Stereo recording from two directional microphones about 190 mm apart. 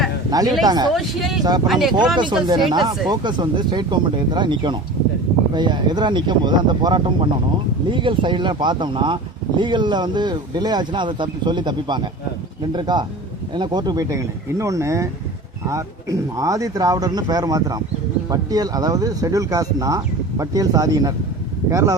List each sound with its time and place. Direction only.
0.3 s speech: 20° right (ahead or behind)
0.9 s speech: centre (ahead or behind)
2.1 s speech: 25° right (ahead or behind)